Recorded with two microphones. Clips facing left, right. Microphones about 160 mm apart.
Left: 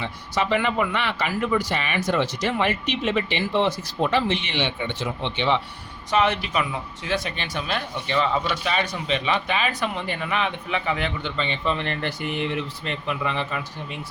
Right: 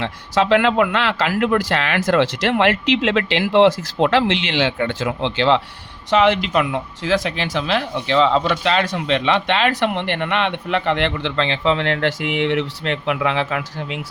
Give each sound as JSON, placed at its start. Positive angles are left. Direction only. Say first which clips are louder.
{"t": 0.0, "sound": "speech", "louder": "right 6 dB", "side_deg": -90}